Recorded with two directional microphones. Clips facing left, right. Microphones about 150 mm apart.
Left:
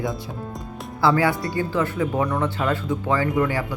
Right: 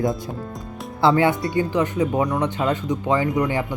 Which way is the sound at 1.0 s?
25° right (ahead or behind).